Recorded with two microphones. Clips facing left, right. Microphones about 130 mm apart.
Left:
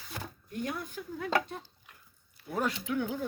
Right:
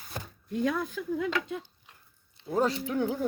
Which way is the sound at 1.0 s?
85° right.